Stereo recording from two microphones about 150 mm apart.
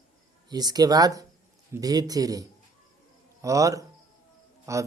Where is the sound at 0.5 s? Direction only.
25° right (ahead or behind).